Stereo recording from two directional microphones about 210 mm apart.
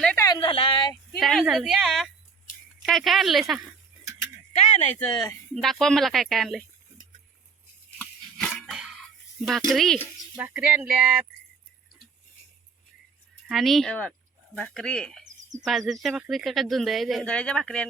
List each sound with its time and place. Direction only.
0.0 s a sound: 5° left (ahead or behind)
0.3 s a sound: 25° left (ahead or behind)
1.1 s speech: centre (ahead or behind)
4.5 s speech: 30° left (ahead or behind)
5.1 s speech: 20° left (ahead or behind)
5.6 s speech: centre (ahead or behind)
8.4 s a sound: 5° left (ahead or behind)
9.4 s speech: centre (ahead or behind)
13.5 s speech: centre (ahead or behind)